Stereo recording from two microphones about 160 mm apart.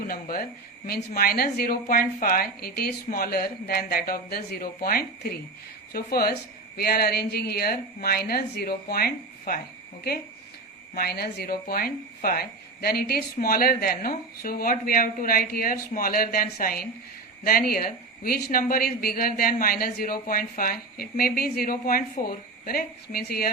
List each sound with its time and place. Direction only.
0.1 s speech: 65° left (ahead or behind)